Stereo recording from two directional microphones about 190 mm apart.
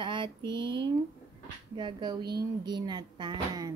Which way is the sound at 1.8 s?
25° right (ahead or behind).